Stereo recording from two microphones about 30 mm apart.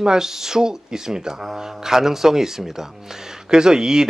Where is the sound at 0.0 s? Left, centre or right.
Centre.